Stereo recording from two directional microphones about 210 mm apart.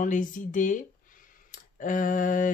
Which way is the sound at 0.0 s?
40° left (ahead or behind).